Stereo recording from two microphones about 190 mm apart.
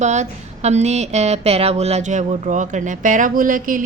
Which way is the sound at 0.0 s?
35° right (ahead or behind).